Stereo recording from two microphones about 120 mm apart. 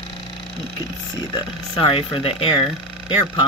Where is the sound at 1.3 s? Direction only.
45° left (ahead or behind).